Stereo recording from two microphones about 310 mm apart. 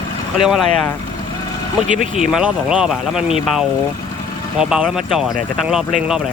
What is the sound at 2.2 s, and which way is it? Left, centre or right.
Speech, centre.